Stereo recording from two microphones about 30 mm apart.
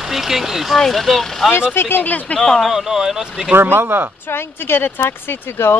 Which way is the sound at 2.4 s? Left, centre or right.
Centre.